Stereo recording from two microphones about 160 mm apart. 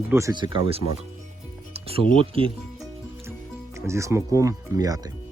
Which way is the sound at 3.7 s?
15° right (ahead or behind).